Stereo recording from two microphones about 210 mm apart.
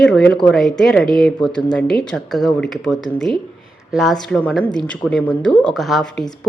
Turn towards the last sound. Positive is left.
turn(degrees=0)  # may be behind; listen again after turning